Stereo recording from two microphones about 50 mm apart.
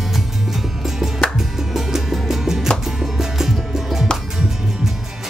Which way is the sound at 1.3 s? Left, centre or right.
Centre.